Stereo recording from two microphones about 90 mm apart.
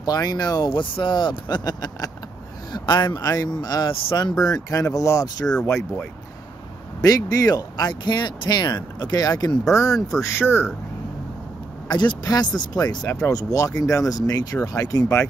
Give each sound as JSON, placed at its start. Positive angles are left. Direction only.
{"t": 0.0, "sound": "speech", "side_deg": 45}
{"t": 7.0, "sound": "speech", "side_deg": 40}
{"t": 11.9, "sound": "speech", "side_deg": 55}